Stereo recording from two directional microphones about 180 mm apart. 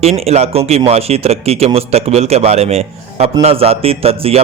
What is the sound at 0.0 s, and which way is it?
Speech, 35° right (ahead or behind).